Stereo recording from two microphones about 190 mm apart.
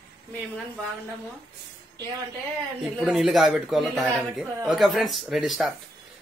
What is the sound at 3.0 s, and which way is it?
A man's voice, centre (ahead or behind).